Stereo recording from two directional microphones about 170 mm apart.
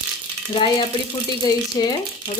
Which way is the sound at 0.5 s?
30° left (ahead or behind).